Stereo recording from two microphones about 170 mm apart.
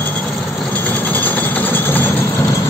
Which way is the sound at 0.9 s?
10° left (ahead or behind).